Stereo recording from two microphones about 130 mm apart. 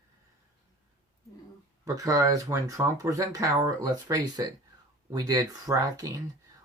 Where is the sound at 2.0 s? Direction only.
25° right (ahead or behind).